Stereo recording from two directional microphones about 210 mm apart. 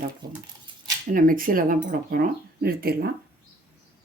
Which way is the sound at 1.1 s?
40° right (ahead or behind).